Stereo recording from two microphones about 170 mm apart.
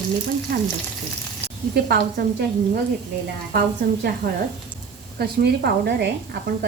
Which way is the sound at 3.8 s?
90° right.